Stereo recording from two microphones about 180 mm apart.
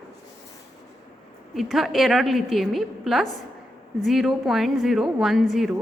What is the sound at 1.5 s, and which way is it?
A woman's voice, centre (ahead or behind).